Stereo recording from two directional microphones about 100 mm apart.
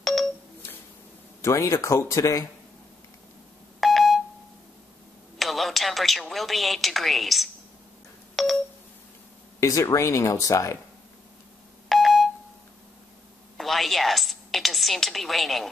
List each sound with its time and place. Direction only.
0.0 s telephone: centre (ahead or behind)
1.4 s speech: 30° left (ahead or behind)
3.8 s beep: centre (ahead or behind)
5.4 s a sound: centre (ahead or behind)
9.6 s speech: 30° left (ahead or behind)
11.9 s telephone dialing: centre (ahead or behind)
13.6 s a woman's voice: centre (ahead or behind)